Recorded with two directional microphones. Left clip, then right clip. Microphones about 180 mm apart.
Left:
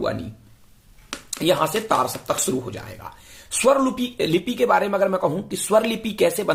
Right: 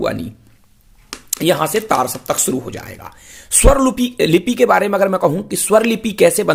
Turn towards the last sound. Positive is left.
turn(degrees=-40)  # may be behind; listen again after turning